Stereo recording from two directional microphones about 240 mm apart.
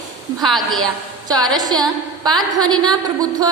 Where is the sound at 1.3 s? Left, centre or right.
Centre.